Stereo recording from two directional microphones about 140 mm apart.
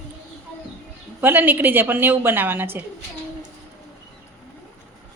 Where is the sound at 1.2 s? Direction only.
15° right (ahead or behind).